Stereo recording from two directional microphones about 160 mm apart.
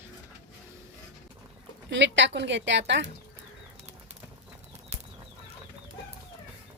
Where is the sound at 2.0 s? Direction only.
90° right.